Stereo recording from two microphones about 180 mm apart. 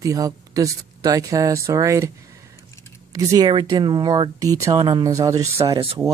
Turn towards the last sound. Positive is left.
turn(degrees=-20)  # may be behind; listen again after turning